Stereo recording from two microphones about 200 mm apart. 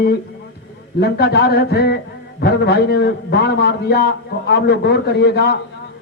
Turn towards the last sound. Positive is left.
turn(degrees=55)  # may be behind; listen again after turning